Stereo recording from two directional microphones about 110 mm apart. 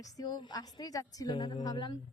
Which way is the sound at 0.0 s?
35° left (ahead or behind).